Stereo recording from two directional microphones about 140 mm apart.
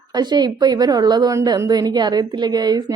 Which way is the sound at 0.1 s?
30° right (ahead or behind).